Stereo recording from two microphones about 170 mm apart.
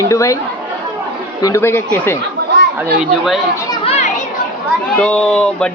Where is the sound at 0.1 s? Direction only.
20° left (ahead or behind).